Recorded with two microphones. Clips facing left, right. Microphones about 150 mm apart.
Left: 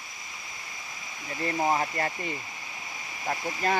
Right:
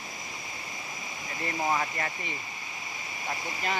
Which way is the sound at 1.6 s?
30° left (ahead or behind).